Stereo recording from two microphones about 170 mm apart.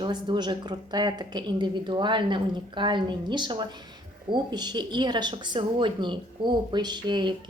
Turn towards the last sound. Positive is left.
turn(degrees=-25)  # may be behind; listen again after turning